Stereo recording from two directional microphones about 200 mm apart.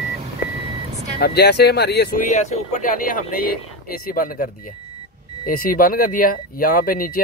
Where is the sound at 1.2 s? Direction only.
55° left (ahead or behind).